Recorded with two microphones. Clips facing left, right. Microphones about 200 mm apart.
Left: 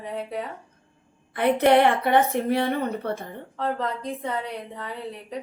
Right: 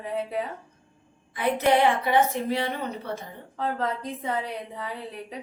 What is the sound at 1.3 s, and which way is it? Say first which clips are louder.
A woman's voice: left 4 dB; 60° left (ahead or behind).